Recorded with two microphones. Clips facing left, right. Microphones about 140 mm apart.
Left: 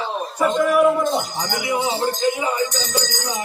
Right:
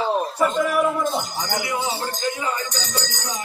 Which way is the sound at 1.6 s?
15° left (ahead or behind).